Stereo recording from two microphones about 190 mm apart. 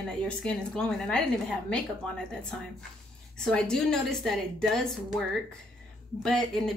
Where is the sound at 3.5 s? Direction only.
5° left (ahead or behind).